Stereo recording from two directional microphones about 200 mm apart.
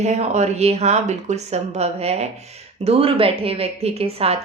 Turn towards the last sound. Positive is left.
turn(degrees=-30)  # may be behind; listen again after turning